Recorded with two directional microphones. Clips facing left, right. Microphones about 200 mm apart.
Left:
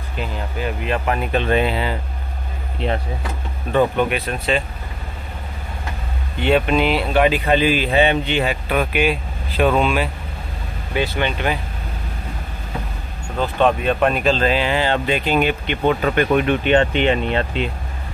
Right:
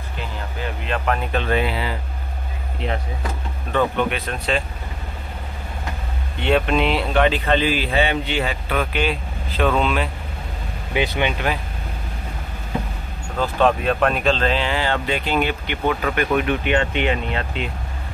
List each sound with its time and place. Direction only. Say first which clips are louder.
0.8 s speech: even; 10° left (ahead or behind)
1.5 s speech: left 3 dB; 25° left (ahead or behind)
3.7 s speech: left 3 dB; 15° left (ahead or behind)
6.4 s speech: left 2 dB; 5° left (ahead or behind)
10.9 s speech: even; 15° right (ahead or behind)
13.4 s speech: left 1 dB; centre (ahead or behind); by 17.5 s 30° left (ahead or behind)